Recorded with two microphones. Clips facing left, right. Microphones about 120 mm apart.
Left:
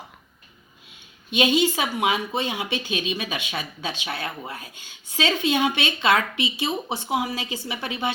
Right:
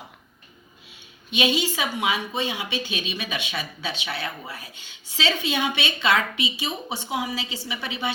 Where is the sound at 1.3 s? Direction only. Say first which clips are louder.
Left 3 dB; 45° left (ahead or behind).